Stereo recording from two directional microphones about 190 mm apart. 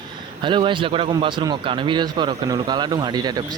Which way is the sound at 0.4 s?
25° right (ahead or behind).